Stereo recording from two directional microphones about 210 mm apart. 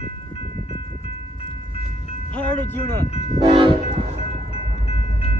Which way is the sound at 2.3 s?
5° left (ahead or behind).